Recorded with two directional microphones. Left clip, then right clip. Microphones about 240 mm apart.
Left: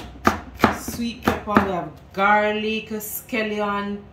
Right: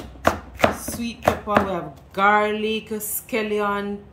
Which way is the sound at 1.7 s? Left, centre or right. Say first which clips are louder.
Left 1 dB; centre.